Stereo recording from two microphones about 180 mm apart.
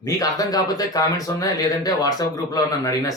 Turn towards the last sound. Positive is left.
turn(degrees=20)  # may be behind; listen again after turning